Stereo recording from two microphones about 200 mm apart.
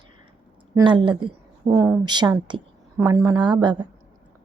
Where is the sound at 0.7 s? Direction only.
25° right (ahead or behind).